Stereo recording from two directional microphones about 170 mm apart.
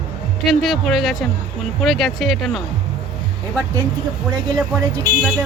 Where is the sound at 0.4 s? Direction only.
Centre (ahead or behind).